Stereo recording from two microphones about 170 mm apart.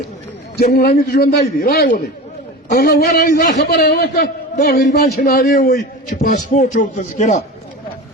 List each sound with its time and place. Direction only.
0.5 s a man's voice: 60° left (ahead or behind); by 7.3 s 45° left (ahead or behind)